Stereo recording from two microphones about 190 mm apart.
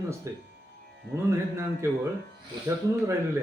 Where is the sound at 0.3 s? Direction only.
15° right (ahead or behind).